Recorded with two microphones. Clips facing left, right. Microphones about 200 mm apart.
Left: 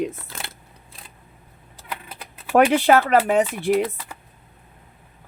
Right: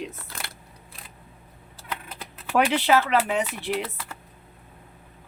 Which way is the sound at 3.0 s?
45° left (ahead or behind).